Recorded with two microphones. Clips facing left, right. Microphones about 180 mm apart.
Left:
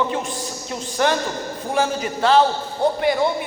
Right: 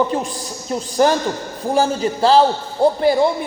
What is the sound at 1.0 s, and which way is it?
A man's voice, 40° right (ahead or behind).